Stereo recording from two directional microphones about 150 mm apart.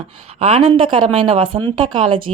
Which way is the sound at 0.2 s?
45° right (ahead or behind).